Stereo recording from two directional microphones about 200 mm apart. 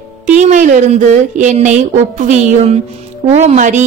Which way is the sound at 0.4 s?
35° right (ahead or behind).